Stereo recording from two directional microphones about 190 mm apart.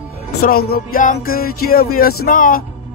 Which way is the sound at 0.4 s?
50° left (ahead or behind).